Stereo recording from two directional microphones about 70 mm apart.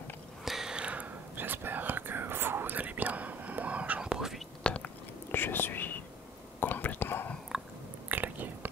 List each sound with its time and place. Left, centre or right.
0.5 s whispering: centre
4.0 s whispering: centre
4.6 s biting: centre
5.3 s whispering: left
8.1 s chewing: right